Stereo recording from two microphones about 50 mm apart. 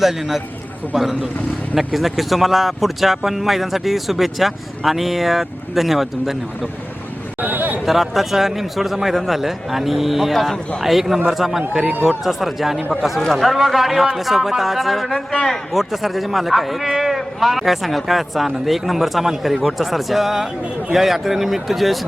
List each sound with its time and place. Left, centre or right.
0.0 s a man's voice: centre
7.4 s a sound: right
7.9 s a man's voice: centre